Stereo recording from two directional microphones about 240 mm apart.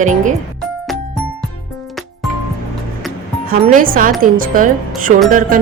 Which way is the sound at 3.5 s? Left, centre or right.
Right.